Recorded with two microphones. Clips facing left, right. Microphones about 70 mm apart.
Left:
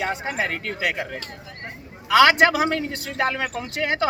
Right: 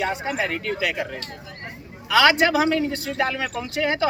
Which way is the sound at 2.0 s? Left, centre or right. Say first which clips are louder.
Left 2 dB; left.